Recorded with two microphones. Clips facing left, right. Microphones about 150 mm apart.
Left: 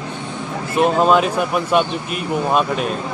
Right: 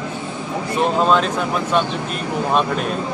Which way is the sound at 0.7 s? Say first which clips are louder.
Left 3 dB; 10° left (ahead or behind).